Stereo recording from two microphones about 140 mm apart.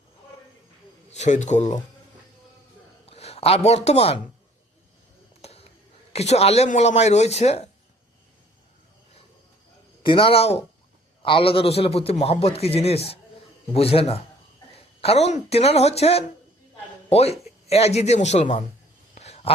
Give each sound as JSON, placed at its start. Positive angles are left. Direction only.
{"t": 1.1, "sound": "a man's voice", "side_deg": 55}
{"t": 3.1, "sound": "speech", "side_deg": 45}
{"t": 5.4, "sound": "a sound", "side_deg": 45}
{"t": 6.1, "sound": "a man's voice", "side_deg": 50}
{"t": 10.0, "sound": "a man's voice", "side_deg": 35}
{"t": 19.1, "sound": "a sound", "side_deg": 50}